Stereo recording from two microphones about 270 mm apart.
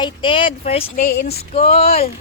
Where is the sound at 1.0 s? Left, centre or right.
Left.